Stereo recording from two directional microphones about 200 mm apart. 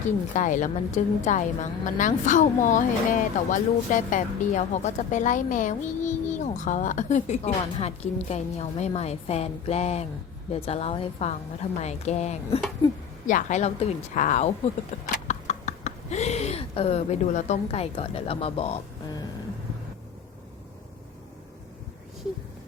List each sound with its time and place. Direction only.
0.0 s speech: 40° left (ahead or behind)